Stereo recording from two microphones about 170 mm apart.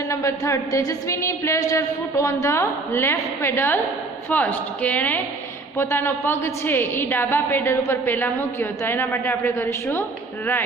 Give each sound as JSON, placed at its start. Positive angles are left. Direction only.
{"t": 0.1, "sound": "a woman's voice", "side_deg": 20}